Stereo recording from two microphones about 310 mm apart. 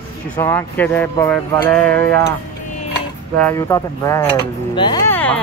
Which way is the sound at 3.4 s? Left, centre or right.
Centre.